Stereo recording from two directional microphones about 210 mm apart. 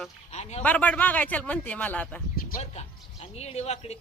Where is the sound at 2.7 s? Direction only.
30° left (ahead or behind).